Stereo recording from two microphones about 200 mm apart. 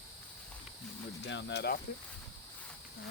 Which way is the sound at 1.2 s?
60° left (ahead or behind).